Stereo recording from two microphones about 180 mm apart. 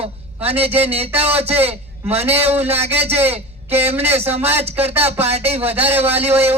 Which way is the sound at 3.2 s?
35° right (ahead or behind).